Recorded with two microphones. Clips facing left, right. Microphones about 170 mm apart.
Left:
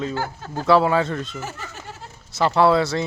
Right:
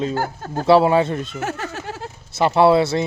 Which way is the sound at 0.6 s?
25° right (ahead or behind).